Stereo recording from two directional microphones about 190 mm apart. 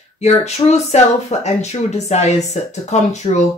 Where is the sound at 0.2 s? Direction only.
35° left (ahead or behind).